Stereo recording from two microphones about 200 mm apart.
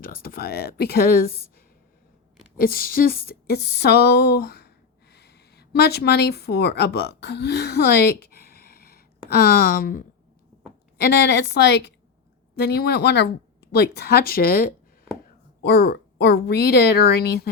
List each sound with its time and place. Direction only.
0.0 s speech: 45° left (ahead or behind)
2.6 s a woman's voice: 45° left (ahead or behind)